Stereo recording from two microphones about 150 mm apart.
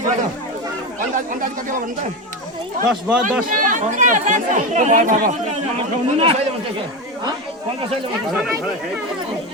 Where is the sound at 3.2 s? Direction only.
60° right (ahead or behind).